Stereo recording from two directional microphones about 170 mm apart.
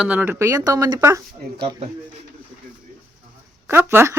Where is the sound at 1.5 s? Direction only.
30° right (ahead or behind).